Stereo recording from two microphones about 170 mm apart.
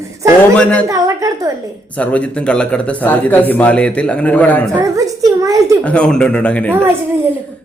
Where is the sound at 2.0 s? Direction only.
10° left (ahead or behind).